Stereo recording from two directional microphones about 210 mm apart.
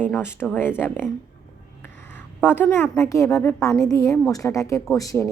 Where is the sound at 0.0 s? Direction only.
10° left (ahead or behind).